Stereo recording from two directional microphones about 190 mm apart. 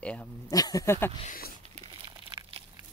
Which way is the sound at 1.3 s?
50° left (ahead or behind).